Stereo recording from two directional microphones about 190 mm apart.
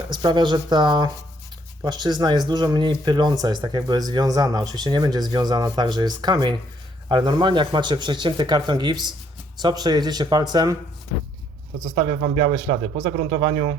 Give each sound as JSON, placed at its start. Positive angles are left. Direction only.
{"t": 0.1, "sound": "speech", "side_deg": -25}
{"t": 11.9, "sound": "speech", "side_deg": -35}